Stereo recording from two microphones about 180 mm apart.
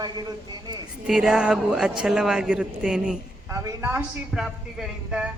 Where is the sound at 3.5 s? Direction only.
15° right (ahead or behind).